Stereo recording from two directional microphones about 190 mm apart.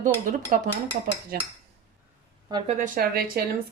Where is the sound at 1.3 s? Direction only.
55° right (ahead or behind).